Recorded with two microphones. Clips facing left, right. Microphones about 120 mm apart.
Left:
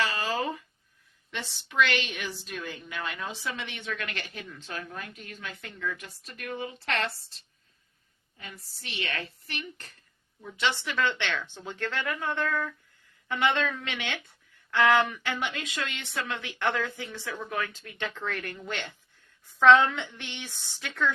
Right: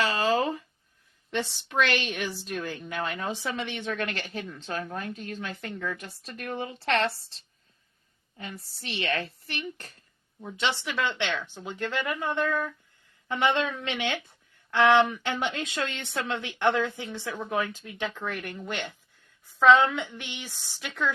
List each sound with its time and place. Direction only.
0.0 s a sound: 30° right (ahead or behind)
1.3 s a woman's voice: 40° right (ahead or behind)
8.4 s speech: 35° right (ahead or behind)
10.8 s a woman's voice: 15° right (ahead or behind)